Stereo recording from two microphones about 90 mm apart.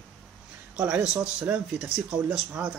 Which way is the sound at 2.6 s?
15° right (ahead or behind).